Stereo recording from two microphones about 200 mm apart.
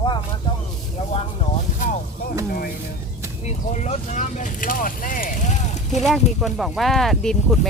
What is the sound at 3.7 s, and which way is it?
Speech, 35° left (ahead or behind).